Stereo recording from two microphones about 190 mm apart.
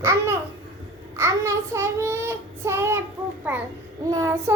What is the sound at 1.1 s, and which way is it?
Child singing, 15° right (ahead or behind).